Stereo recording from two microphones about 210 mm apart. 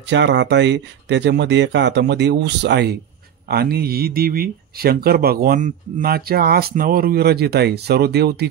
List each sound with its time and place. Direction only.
0.1 s speech: 55° right (ahead or behind)